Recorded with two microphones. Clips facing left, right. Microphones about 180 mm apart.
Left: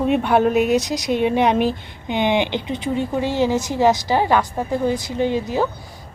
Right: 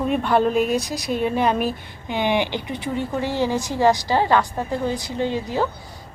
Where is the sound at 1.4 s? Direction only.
85° left.